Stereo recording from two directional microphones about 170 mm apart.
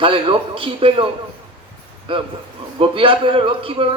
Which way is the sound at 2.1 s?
30° right (ahead or behind).